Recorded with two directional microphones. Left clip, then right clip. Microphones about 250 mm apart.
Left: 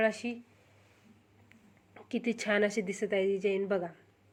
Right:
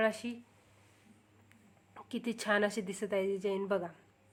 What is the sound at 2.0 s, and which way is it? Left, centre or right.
Speech, centre.